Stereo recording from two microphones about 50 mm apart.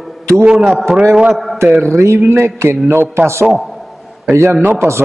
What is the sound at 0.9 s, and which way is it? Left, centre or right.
Speech, centre.